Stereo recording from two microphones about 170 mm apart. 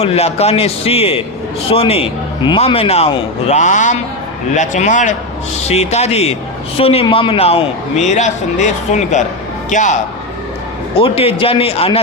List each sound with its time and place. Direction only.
0.0 s a man's voice: 35° left (ahead or behind)
11.0 s a man's voice: 35° left (ahead or behind)